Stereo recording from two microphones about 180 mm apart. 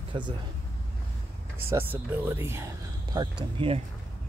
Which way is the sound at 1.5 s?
15° right (ahead or behind).